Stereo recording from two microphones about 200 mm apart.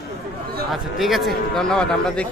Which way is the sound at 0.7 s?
Centre (ahead or behind).